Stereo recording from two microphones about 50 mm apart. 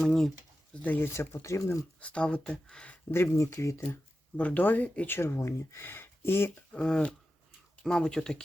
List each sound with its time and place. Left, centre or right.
0.0 s speech: centre
0.8 s speech: left
1.0 s speech: left
2.0 s speech: left
3.3 s speech: left
4.4 s speech: left
5.0 s speech: left
5.4 s speech: left
6.7 s speech: centre